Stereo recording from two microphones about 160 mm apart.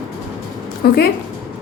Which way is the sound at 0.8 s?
70° left (ahead or behind).